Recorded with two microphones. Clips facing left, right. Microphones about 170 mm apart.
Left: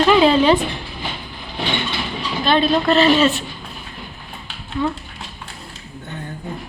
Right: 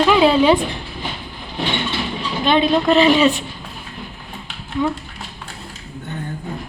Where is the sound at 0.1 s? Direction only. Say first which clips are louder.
Even; 10° right (ahead or behind).